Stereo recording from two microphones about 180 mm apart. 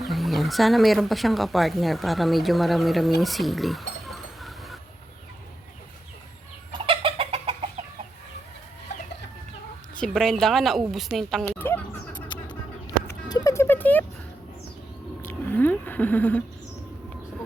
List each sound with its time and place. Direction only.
0.0 s speech: centre (ahead or behind)
3.2 s a sound: centre (ahead or behind)
6.7 s chicken: 30° right (ahead or behind)
10.0 s speech: 5° left (ahead or behind)
11.4 s vehicle: 10° left (ahead or behind)
13.2 s music: 20° left (ahead or behind)
15.3 s a sound: 10° left (ahead or behind)